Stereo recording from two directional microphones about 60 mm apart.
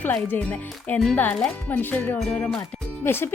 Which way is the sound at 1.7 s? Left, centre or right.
Left.